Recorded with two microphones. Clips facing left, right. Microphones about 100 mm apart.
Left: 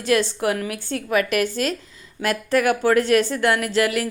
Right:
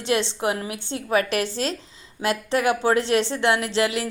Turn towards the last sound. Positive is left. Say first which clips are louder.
# left 2 dB
turn(degrees=-25)  # may be behind; listen again after turning